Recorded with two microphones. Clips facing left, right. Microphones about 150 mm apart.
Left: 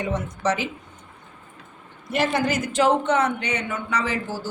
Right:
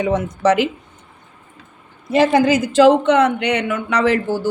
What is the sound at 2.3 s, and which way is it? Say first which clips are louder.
A man's voice: right 9 dB; 90° right.